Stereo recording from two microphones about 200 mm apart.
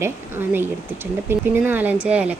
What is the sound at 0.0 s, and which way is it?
Speech, 10° right (ahead or behind).